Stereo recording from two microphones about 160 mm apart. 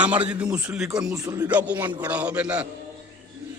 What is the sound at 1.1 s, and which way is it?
Speech, 20° right (ahead or behind).